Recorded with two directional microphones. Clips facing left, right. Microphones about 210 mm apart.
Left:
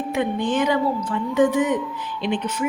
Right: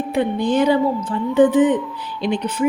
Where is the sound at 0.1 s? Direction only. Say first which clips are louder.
Right 4 dB; 35° right (ahead or behind).